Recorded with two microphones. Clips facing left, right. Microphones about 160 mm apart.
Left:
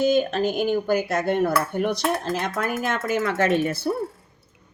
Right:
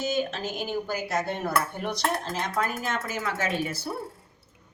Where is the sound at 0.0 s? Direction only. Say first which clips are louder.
Left 8 dB; 60° left (ahead or behind).